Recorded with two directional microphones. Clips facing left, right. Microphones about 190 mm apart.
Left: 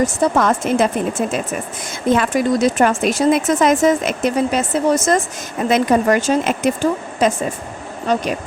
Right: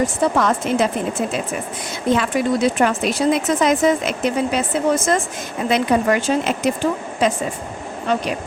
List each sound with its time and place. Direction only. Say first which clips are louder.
0.0 s speech: left 2 dB; 50° left (ahead or behind)